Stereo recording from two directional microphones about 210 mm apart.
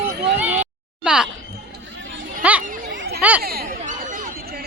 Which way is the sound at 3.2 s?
5° right (ahead or behind).